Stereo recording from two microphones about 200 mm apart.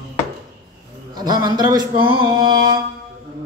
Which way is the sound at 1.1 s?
20° right (ahead or behind).